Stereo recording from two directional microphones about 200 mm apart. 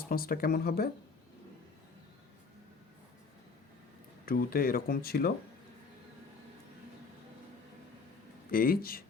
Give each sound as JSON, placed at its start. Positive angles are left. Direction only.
{"t": 0.1, "sound": "speech", "side_deg": 45}
{"t": 4.3, "sound": "speech", "side_deg": 45}
{"t": 8.4, "sound": "speech", "side_deg": 45}